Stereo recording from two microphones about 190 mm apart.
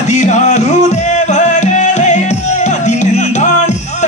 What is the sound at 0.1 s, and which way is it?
Music, 40° left (ahead or behind).